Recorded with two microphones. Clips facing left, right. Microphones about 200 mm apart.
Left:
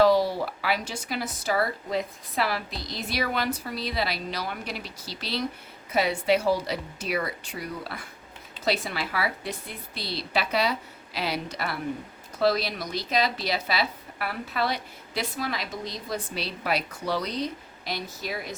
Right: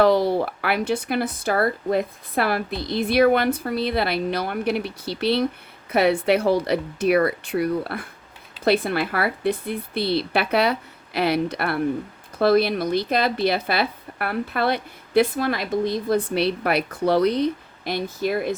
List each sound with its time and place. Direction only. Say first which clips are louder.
0.0 s speech: right 3 dB; 60° right (ahead or behind)